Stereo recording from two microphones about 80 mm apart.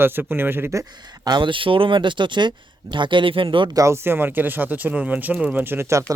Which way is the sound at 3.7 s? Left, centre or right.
Right.